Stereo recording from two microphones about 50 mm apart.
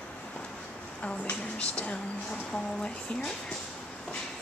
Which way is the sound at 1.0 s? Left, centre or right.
Left.